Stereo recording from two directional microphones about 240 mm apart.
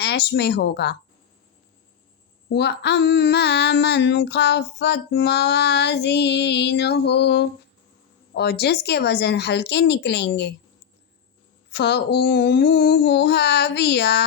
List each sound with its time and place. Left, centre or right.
0.0 s speech: left
2.5 s female singing: left
11.7 s female singing: left